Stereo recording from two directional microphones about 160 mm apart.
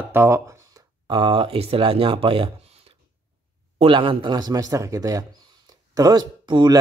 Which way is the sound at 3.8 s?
30° right (ahead or behind).